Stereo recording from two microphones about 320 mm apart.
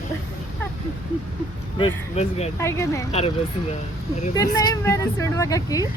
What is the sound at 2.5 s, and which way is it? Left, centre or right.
Speech, centre.